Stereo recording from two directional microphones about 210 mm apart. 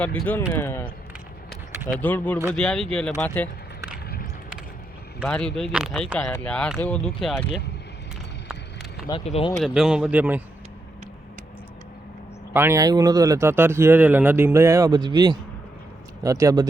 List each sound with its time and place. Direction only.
0.0 s speech: 5° left (ahead or behind)
2.0 s speech: 10° left (ahead or behind)
5.2 s speech: 5° left (ahead or behind)
9.0 s speech: 25° left (ahead or behind)
9.6 s speech: 5° right (ahead or behind)
12.5 s speech: 15° right (ahead or behind)